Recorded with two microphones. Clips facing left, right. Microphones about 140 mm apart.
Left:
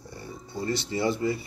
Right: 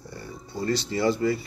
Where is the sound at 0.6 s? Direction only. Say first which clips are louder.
Right 3 dB; 25° left (ahead or behind).